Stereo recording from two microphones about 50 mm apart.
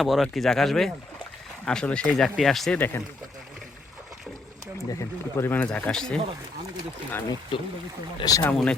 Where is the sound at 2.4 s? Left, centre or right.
Centre.